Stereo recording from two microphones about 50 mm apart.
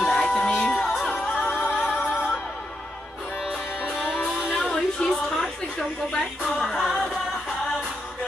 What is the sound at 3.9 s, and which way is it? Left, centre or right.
Music, centre.